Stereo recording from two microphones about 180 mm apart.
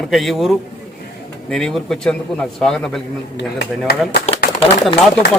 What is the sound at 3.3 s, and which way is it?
Speech, 65° left (ahead or behind).